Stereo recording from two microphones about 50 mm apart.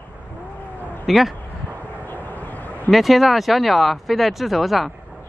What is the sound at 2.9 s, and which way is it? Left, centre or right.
Speech, centre.